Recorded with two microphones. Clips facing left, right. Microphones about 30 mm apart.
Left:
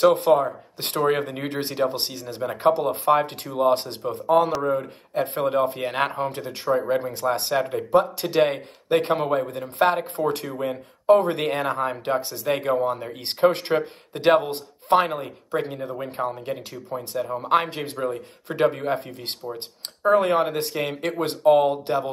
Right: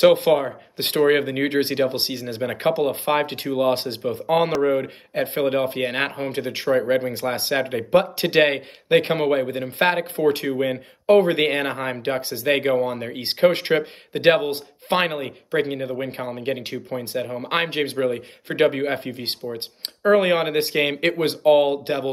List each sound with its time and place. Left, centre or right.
0.1 s speech: right
5.8 s speech: right
6.8 s speech: right
16.0 s speech: right
17.5 s speech: right